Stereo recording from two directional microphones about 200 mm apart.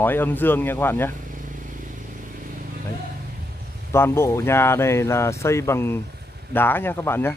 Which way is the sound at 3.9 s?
10° left (ahead or behind).